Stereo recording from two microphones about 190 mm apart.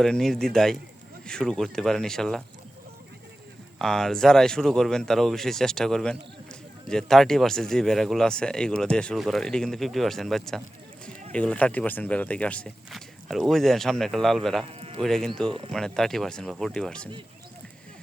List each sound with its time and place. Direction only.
0.0 s speech: centre (ahead or behind)
3.8 s speech: centre (ahead or behind)
14.6 s speech: 30° right (ahead or behind)
15.0 s speech: centre (ahead or behind)